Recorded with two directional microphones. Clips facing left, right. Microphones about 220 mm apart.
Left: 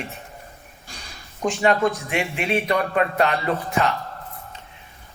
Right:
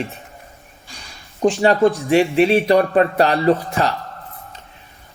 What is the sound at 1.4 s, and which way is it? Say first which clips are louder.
A man's voice: right 6 dB; 30° right (ahead or behind).